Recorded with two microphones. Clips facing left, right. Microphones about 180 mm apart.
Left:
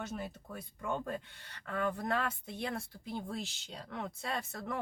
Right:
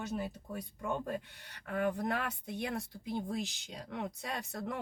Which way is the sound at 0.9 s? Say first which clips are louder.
Even; 10° right (ahead or behind).